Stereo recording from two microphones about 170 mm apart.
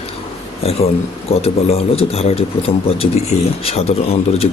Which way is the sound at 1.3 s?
35° left (ahead or behind).